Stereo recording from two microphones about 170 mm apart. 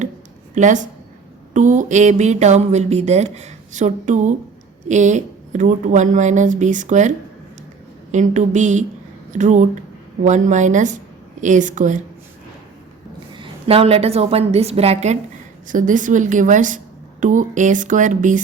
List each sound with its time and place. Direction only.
0.5 s a woman's voice: 45° right (ahead or behind)
13.3 s a woman's voice: 30° right (ahead or behind); by 18.4 s 50° right (ahead or behind)